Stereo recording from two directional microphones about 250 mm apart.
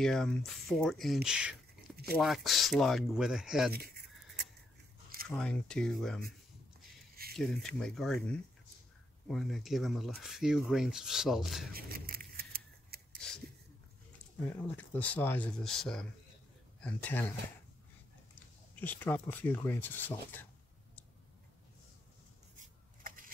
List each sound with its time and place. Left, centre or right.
0.0 s speech: centre
5.3 s speech: centre
7.3 s speech: centre
11.7 s scissors: right
14.4 s speech: centre
18.8 s speech: centre
23.0 s a sound: right